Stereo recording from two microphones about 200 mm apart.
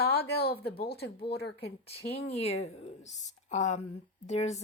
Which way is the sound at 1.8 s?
30° left (ahead or behind).